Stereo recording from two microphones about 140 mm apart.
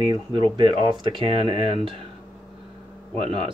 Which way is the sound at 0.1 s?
35° right (ahead or behind).